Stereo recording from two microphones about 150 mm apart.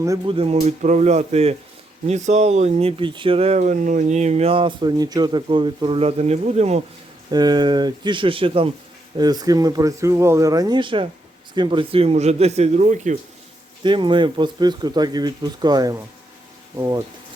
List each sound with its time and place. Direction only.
0.3 s speech: 40° right (ahead or behind)
7.3 s speech: 25° right (ahead or behind)
9.1 s speech: 25° right (ahead or behind); by 13.1 s 55° right (ahead or behind)
13.8 s speech: 30° right (ahead or behind)